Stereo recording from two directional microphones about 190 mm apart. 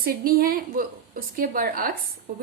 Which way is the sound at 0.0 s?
50° right (ahead or behind).